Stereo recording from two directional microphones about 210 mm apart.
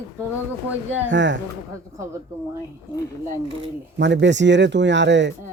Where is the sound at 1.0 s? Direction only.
60° right (ahead or behind).